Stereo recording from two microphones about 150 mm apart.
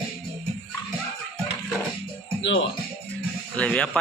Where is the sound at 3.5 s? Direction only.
10° left (ahead or behind).